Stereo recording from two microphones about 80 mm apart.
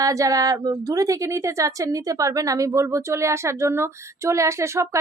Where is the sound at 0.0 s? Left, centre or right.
Right.